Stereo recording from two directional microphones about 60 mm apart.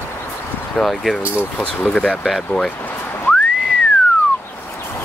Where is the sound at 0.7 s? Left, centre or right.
Centre.